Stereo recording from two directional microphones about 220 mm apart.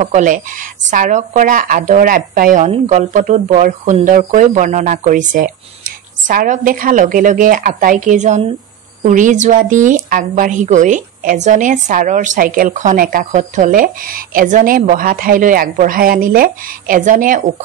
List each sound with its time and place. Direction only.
0.0 s a woman's voice: 35° right (ahead or behind)